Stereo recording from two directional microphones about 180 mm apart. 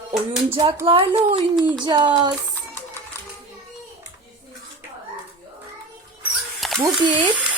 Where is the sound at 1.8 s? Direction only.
25° right (ahead or behind).